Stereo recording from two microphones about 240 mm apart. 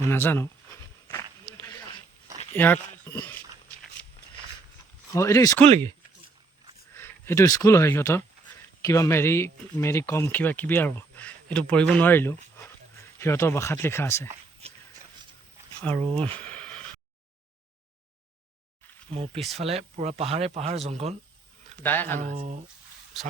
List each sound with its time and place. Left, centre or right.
0.1 s speech: centre
1.0 s a sound: centre
2.6 s speech: centre
5.1 s speech: centre
6.9 s speech: centre
15.8 s speech: centre
16.4 s a sound: centre
19.1 s speech: right
21.8 s speech: centre
22.2 s speech: right